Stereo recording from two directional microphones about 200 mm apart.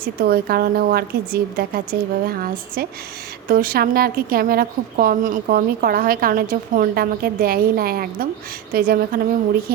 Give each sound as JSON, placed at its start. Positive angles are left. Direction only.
{"t": 0.0, "sound": "a woman's voice", "side_deg": -50}